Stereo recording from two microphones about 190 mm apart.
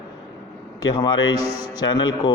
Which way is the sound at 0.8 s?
20° left (ahead or behind).